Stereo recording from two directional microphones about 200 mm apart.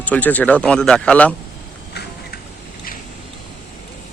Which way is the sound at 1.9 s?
55° left (ahead or behind).